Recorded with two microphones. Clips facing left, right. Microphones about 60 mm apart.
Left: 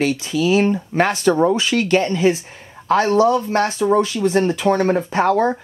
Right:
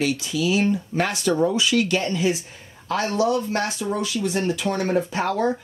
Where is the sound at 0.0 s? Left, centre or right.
Left.